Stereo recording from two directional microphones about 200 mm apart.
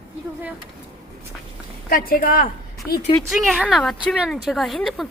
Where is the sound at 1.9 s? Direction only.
45° left (ahead or behind).